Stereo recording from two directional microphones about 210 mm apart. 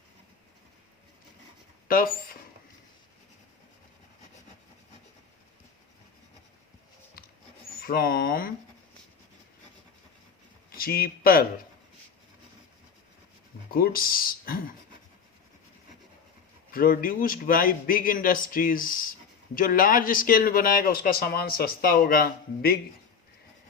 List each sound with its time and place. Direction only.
1.9 s speech: 45° left (ahead or behind)
7.8 s speech: 45° left (ahead or behind)
10.7 s speech: 45° left (ahead or behind)
13.7 s speech: 45° left (ahead or behind)
16.7 s speech: 40° left (ahead or behind)